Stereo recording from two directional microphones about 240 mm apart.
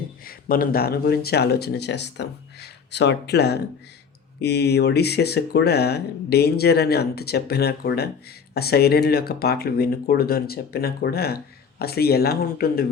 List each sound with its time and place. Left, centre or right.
0.3 s speech: left